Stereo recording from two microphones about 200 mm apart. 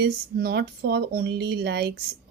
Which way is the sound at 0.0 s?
55° right (ahead or behind).